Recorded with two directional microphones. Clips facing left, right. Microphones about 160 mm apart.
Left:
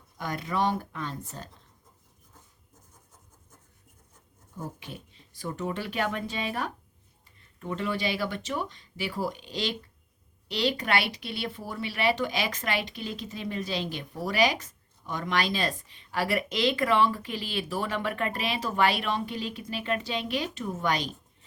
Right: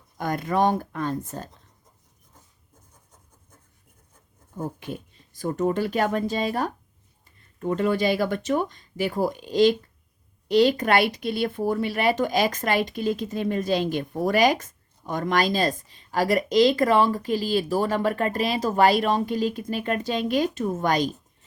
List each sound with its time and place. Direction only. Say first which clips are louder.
0.2 s speech: right 6 dB; 45° right (ahead or behind)
4.5 s speech: right 7 dB; 45° right (ahead or behind)